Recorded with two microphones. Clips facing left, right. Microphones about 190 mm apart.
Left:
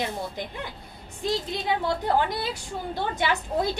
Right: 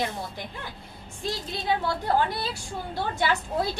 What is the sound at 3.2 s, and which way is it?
Speech, 20° left (ahead or behind).